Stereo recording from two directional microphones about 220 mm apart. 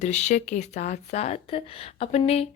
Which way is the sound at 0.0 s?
30° left (ahead or behind).